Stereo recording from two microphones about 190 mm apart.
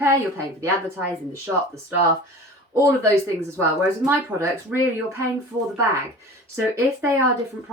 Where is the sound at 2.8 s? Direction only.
15° right (ahead or behind).